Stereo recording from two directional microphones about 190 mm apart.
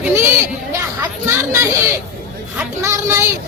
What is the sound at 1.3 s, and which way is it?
Speech, 15° right (ahead or behind).